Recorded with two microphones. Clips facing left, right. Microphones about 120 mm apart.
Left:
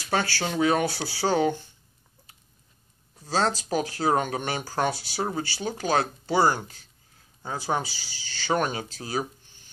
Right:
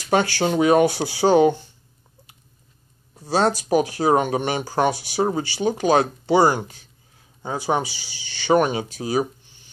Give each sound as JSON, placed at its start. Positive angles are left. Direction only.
{"t": 0.4, "sound": "speech", "side_deg": -20}
{"t": 3.2, "sound": "speech", "side_deg": -15}